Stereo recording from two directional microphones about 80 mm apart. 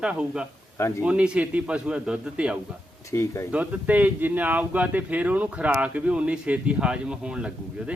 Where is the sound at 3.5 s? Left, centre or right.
Centre.